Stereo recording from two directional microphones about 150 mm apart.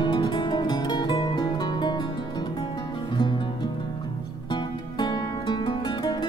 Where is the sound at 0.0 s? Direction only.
30° left (ahead or behind).